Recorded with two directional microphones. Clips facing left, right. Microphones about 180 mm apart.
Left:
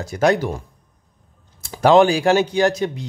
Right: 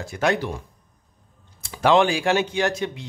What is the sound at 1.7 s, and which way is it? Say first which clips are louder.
Speech: left 5 dB; 40° left (ahead or behind).